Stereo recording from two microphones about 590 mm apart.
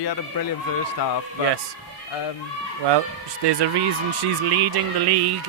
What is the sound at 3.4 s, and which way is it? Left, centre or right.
Speech, right.